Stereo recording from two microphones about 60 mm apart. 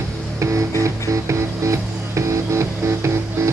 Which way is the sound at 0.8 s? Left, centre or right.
Right.